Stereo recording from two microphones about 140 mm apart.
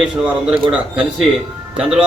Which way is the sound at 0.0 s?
5° right (ahead or behind).